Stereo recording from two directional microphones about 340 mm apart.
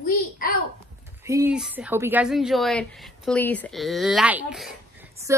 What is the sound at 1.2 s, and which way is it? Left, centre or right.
Speech, centre.